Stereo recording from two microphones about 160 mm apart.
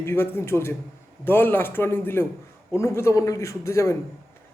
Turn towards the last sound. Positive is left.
turn(degrees=20)  # may be behind; listen again after turning